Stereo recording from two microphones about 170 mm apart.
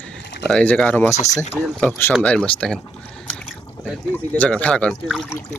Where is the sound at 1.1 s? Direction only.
40° left (ahead or behind).